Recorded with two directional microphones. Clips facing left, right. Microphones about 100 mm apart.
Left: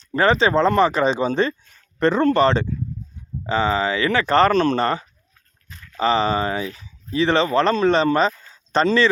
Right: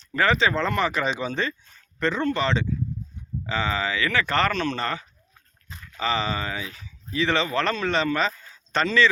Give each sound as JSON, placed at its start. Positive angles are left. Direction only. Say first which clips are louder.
{"t": 0.0, "sound": "speech", "louder": "left 4 dB", "side_deg": 35}
{"t": 3.4, "sound": "speech", "louder": "left 6 dB", "side_deg": 35}
{"t": 8.4, "sound": "a sound", "louder": "left 6 dB", "side_deg": 30}